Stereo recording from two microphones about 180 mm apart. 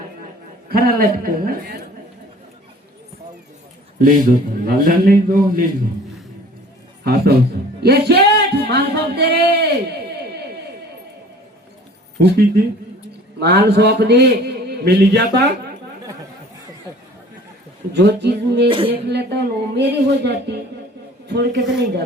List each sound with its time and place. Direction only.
0.7 s a man's voice: 55° right (ahead or behind)
3.9 s a man's voice: 50° right (ahead or behind)
7.0 s speech: 60° right (ahead or behind)
12.2 s a man's voice: 60° right (ahead or behind)
17.9 s speech: 70° right (ahead or behind)
18.7 s a woman's voice: 30° right (ahead or behind)
19.0 s speech: 70° right (ahead or behind)